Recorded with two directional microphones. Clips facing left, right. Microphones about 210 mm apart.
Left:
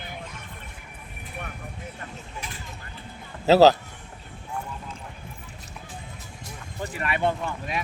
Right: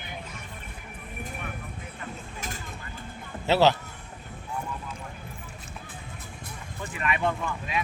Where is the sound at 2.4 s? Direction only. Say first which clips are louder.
Right 1 dB; 45° right (ahead or behind).